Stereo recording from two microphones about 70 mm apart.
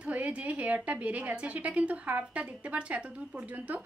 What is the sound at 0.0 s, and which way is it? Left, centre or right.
Speech, centre.